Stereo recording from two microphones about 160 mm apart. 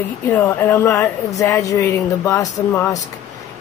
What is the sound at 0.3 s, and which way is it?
Speech, 15° left (ahead or behind).